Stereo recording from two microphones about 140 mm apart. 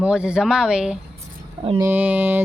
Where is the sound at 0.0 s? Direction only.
5° right (ahead or behind).